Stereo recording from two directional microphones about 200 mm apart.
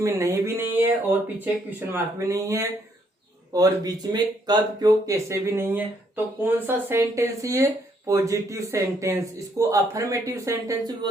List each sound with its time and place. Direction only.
0.0 s speech: 15° right (ahead or behind)
1.9 s speech: 15° right (ahead or behind)